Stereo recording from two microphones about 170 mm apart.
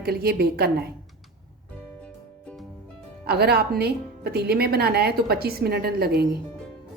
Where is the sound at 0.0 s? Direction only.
65° right (ahead or behind).